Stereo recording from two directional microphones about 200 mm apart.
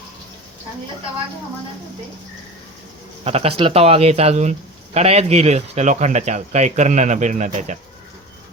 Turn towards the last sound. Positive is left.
turn(degrees=-35)  # may be behind; listen again after turning